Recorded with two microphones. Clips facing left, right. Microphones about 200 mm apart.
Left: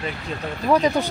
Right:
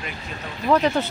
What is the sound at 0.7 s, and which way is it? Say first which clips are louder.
Speech: left 1 dB; 10° left (ahead or behind).